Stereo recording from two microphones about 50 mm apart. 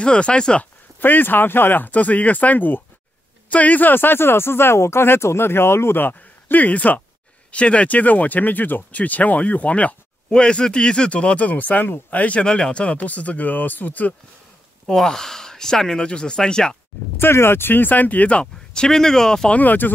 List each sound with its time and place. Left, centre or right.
0.0 s speech: left
0.9 s speech: left
14.9 s speech: centre
17.2 s speech: left; by 19.5 s centre
19.5 s speech: left